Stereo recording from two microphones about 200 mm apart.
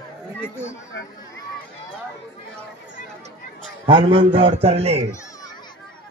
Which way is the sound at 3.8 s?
25° right (ahead or behind).